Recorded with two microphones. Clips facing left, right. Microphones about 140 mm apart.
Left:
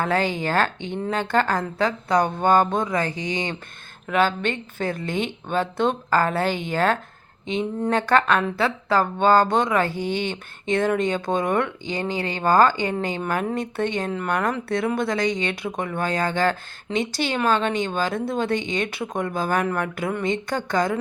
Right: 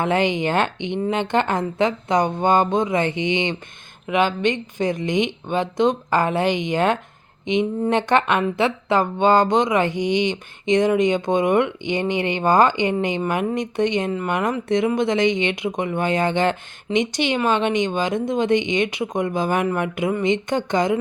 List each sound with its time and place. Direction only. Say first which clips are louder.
0.0 s speech: right 3 dB; 20° right (ahead or behind)